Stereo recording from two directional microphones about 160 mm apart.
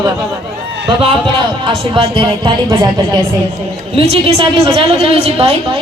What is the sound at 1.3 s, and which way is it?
Speech, 35° right (ahead or behind).